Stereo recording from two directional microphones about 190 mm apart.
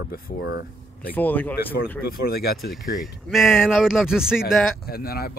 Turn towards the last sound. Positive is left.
turn(degrees=55)  # may be behind; listen again after turning